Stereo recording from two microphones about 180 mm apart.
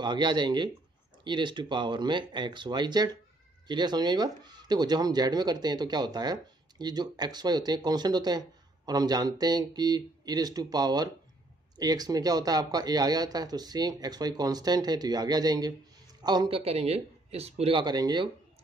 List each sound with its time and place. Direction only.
0.0 s speech: 25° right (ahead or behind)